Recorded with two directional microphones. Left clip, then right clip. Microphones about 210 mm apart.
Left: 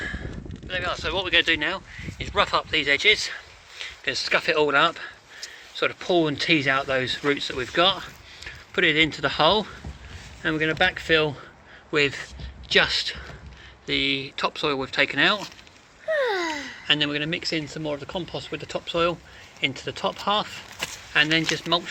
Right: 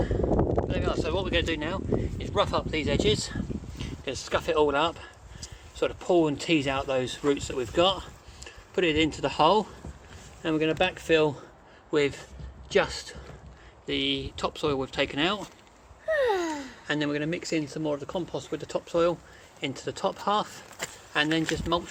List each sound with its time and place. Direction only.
0.7 s speech: 5° right (ahead or behind)
16.0 s a sound: 35° right (ahead or behind)
16.8 s speech: 15° right (ahead or behind)